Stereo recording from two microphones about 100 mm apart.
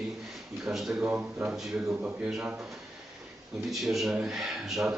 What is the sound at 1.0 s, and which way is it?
Speech, 15° right (ahead or behind).